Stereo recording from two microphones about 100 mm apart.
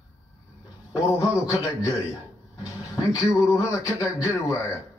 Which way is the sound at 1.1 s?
30° left (ahead or behind).